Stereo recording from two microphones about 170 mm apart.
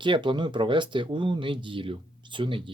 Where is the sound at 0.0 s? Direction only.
30° right (ahead or behind).